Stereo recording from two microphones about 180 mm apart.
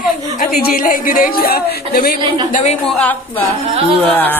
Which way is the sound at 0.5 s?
55° left (ahead or behind).